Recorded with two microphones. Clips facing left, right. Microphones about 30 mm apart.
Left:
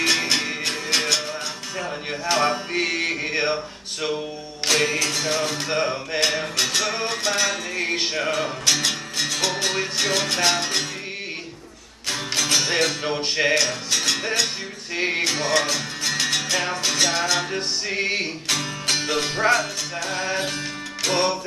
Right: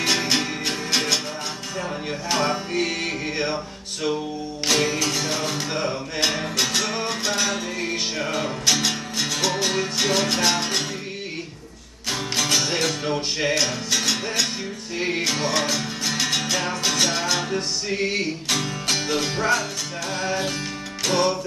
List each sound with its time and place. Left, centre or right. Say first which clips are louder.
0.0 s music: left 1 dB; centre; by 3.5 s left
4.6 s music: left 1 dB; centre
5.7 s music: left 2 dB; left
6.2 s music: right 1 dB; centre
7.8 s music: left 5 dB; left
8.3 s music: right 1 dB; centre
12.1 s music: even; centre
12.6 s music: left 1 dB; centre
13.6 s music: even; centre
15.0 s music: left 2 dB; left
15.2 s music: left 1 dB; centre
17.6 s music: even; left
18.5 s music: left 1 dB; centre